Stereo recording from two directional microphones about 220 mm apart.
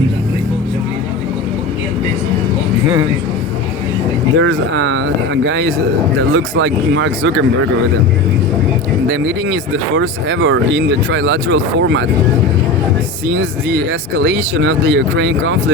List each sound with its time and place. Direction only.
4.4 s speech: 60° right (ahead or behind)
9.0 s speech: 60° right (ahead or behind)
13.2 s speech: 60° right (ahead or behind)